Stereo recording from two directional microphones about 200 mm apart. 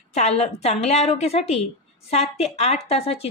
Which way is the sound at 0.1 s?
30° left (ahead or behind).